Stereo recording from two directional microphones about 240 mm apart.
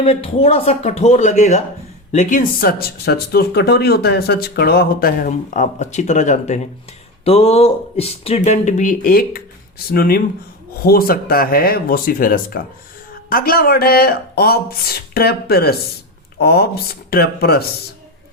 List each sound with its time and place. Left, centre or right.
0.0 s speech: left